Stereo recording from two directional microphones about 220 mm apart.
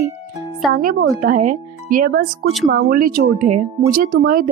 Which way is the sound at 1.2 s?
35° right (ahead or behind).